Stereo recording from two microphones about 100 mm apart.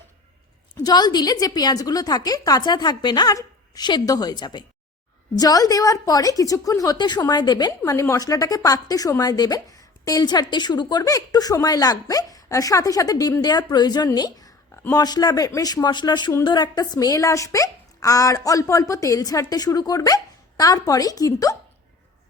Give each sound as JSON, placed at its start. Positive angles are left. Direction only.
{"t": 0.8, "sound": "a woman's voice", "side_deg": 45}
{"t": 7.9, "sound": "a woman's voice", "side_deg": 30}